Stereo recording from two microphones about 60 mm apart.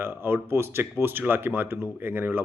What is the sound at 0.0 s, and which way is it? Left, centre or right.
Speech, right.